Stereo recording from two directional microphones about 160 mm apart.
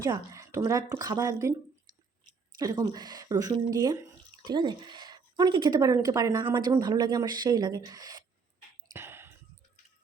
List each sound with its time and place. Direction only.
0.0 s speech: 20° right (ahead or behind)
2.6 s speech: 20° right (ahead or behind)
8.9 s a sound: 15° right (ahead or behind)